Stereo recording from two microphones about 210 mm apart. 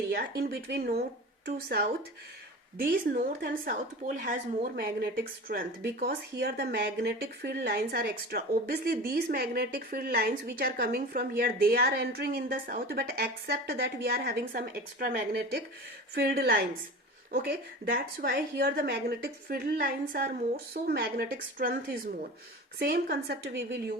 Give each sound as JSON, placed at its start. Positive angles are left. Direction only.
{"t": 0.1, "sound": "speech", "side_deg": -45}
{"t": 2.9, "sound": "speech", "side_deg": -45}
{"t": 22.8, "sound": "speech", "side_deg": -45}